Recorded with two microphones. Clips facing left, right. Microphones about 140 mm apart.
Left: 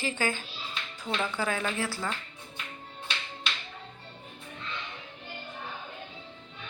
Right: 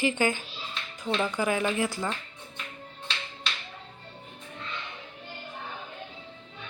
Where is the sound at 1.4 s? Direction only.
15° right (ahead or behind).